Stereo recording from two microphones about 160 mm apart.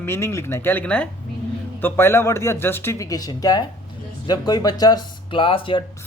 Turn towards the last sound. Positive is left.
turn(degrees=30)  # may be behind; listen again after turning